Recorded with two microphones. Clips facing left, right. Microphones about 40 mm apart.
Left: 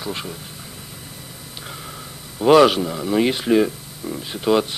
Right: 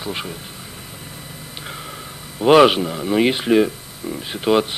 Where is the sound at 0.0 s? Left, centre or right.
Centre.